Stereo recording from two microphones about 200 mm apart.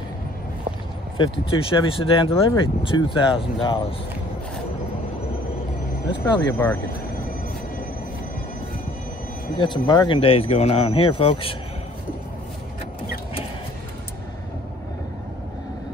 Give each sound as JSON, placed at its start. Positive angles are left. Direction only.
{"t": 1.1, "sound": "speech", "side_deg": 25}
{"t": 6.0, "sound": "speech", "side_deg": 25}
{"t": 9.6, "sound": "speech", "side_deg": 20}